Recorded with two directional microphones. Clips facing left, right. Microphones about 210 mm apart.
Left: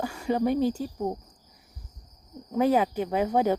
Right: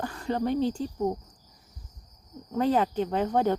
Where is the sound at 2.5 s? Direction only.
10° left (ahead or behind).